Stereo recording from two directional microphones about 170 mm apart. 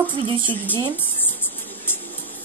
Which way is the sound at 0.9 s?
10° left (ahead or behind).